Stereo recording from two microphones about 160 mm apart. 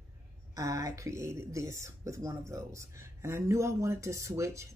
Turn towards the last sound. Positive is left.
turn(degrees=-20)  # may be behind; listen again after turning